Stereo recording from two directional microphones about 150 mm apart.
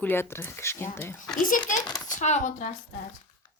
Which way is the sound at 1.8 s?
25° left (ahead or behind).